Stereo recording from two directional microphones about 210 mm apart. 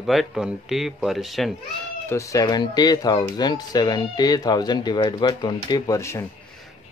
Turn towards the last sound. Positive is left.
turn(degrees=15)  # may be behind; listen again after turning